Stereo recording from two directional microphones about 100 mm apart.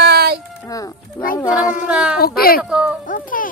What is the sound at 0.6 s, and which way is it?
Speech, 35° left (ahead or behind).